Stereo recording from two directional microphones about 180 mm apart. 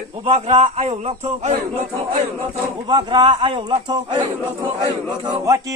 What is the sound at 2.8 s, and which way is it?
Speech, 25° right (ahead or behind).